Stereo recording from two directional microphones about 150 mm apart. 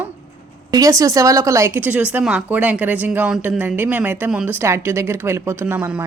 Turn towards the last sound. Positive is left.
turn(degrees=-10)  # may be behind; listen again after turning